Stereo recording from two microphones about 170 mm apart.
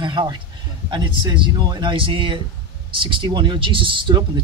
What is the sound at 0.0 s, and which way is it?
A man's voice, 25° right (ahead or behind).